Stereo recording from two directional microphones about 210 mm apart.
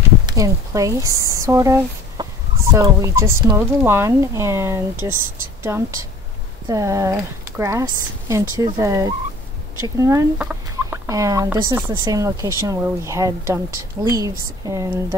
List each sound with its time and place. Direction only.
0.3 s speech: 15° right (ahead or behind)